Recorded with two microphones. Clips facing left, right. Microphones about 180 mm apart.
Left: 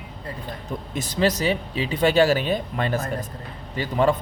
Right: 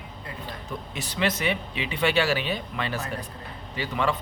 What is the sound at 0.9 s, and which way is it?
Speech, 45° left (ahead or behind).